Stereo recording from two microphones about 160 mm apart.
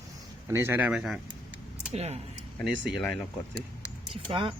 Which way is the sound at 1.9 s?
40° right (ahead or behind).